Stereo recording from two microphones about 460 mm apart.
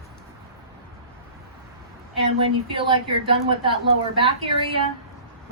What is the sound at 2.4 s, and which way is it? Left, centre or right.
A woman's voice, centre.